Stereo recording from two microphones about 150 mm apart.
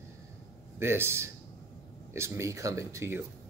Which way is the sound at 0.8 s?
15° right (ahead or behind).